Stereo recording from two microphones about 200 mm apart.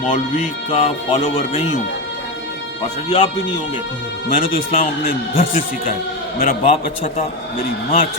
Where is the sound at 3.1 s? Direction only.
25° left (ahead or behind).